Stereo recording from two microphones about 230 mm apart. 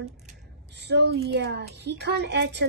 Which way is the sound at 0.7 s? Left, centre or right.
Right.